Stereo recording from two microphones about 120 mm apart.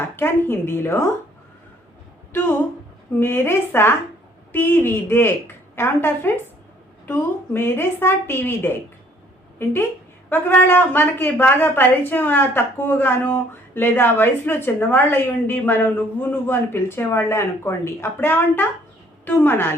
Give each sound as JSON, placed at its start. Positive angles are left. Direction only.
{"t": 0.2, "sound": "a woman's voice", "side_deg": 20}
{"t": 2.3, "sound": "a woman's voice", "side_deg": 15}
{"t": 10.2, "sound": "a woman's voice", "side_deg": 15}